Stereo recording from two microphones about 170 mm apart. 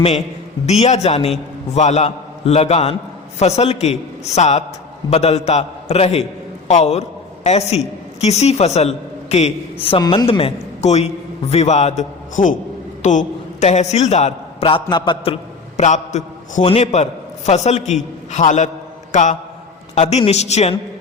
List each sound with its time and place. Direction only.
0.6 s a man's voice: 40° left (ahead or behind)
15.8 s a man's voice: 45° left (ahead or behind)